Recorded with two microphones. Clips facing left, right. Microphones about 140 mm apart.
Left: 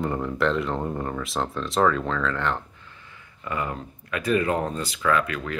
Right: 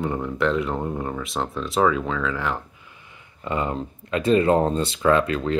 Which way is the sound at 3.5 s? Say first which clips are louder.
Right 4 dB; 25° right (ahead or behind).